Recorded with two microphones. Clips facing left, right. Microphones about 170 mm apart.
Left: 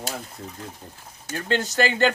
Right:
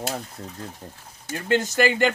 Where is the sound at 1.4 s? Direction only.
15° right (ahead or behind).